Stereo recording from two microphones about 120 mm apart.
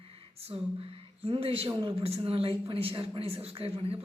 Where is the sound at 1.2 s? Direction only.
55° right (ahead or behind).